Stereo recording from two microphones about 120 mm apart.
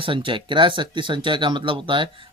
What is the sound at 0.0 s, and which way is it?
Speech, 45° right (ahead or behind).